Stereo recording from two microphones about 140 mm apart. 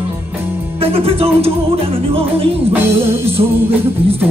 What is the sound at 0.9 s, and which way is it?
Music, 45° right (ahead or behind).